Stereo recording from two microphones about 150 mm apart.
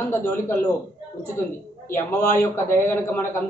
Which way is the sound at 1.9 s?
15° left (ahead or behind).